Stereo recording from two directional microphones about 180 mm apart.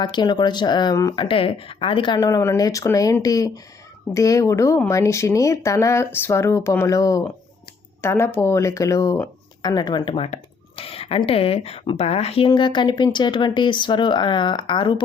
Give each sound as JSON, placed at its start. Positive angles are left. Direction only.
{"t": 0.0, "sound": "speech", "side_deg": 25}